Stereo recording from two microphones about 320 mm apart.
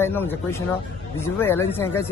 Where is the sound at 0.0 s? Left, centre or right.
Centre.